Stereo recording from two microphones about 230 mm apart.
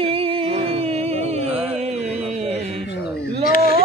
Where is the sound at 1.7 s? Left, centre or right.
Right.